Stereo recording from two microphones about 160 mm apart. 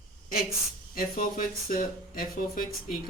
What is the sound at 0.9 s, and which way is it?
Speech, 60° left (ahead or behind).